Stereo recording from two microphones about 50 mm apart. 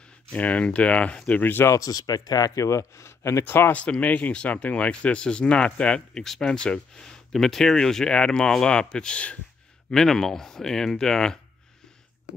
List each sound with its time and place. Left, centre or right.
0.3 s speech: left
2.6 s speech: left
3.4 s speech: left
3.7 s speech: left
9.8 s speech: centre